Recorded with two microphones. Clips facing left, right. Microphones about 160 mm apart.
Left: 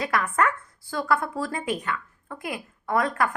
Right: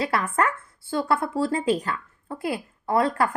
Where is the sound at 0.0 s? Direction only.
30° right (ahead or behind).